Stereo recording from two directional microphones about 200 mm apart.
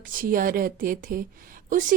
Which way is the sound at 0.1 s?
45° right (ahead or behind).